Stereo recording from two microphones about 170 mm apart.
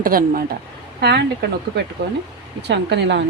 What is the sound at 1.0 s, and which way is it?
Speech, 80° right.